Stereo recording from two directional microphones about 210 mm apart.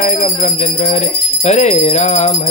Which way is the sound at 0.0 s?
35° left (ahead or behind).